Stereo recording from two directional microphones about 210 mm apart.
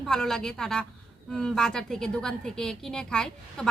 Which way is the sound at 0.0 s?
Centre (ahead or behind).